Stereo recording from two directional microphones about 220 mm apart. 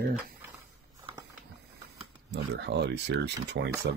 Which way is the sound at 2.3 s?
50° right (ahead or behind).